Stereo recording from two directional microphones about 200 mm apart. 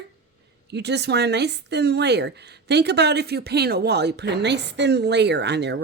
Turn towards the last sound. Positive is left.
turn(degrees=-60)  # may be behind; listen again after turning